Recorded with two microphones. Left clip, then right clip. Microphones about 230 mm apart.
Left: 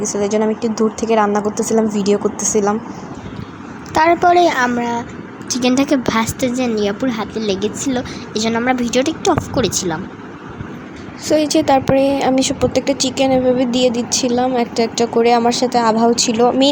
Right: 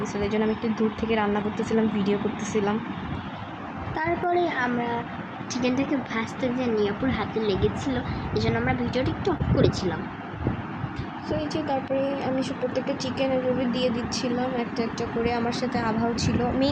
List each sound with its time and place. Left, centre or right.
0.1 s a woman's voice: left
3.9 s speech: left
11.3 s speech: left